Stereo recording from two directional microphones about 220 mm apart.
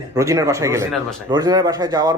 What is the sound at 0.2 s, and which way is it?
Speech, 15° right (ahead or behind).